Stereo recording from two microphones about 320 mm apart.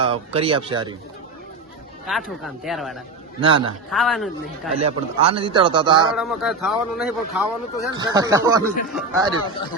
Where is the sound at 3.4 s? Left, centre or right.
Centre.